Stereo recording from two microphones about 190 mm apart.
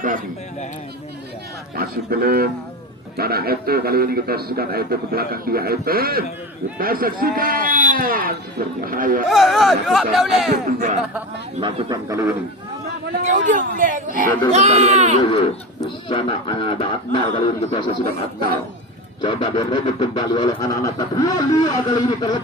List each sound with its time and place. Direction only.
1.7 s a man's voice: 50° right (ahead or behind)
9.3 s speech: centre (ahead or behind)
11.6 s speech: 25° right (ahead or behind)
13.2 s a man's voice: 40° right (ahead or behind)
15.8 s a man's voice: 25° left (ahead or behind)
19.2 s speech: 25° left (ahead or behind)